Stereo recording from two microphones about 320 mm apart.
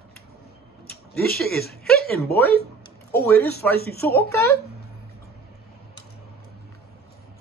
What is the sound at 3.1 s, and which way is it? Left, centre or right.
Speech, left.